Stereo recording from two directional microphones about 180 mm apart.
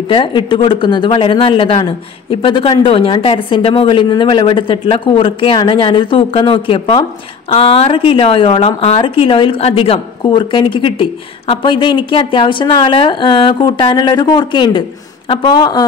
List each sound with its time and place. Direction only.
0.1 s speech: 30° left (ahead or behind)